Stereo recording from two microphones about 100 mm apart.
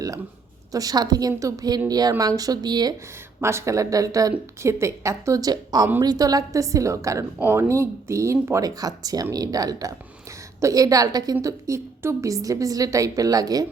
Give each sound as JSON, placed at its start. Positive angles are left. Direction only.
{"t": 0.7, "sound": "speech", "side_deg": -40}
{"t": 3.4, "sound": "speech", "side_deg": -30}